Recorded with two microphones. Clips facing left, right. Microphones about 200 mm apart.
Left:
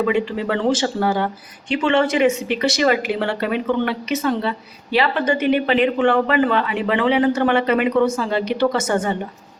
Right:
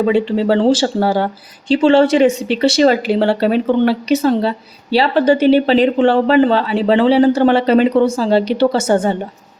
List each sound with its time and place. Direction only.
0.0 s speech: 30° right (ahead or behind)